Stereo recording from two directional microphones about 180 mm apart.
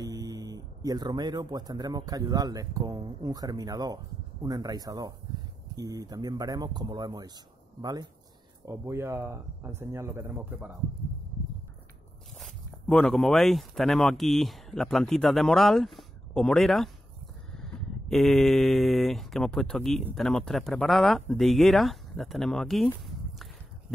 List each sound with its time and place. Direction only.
0.0 s speech: 20° right (ahead or behind)
12.4 s speech: 5° left (ahead or behind)